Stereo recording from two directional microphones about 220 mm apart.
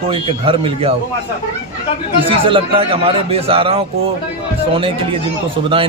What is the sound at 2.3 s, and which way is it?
A man's voice, 25° right (ahead or behind).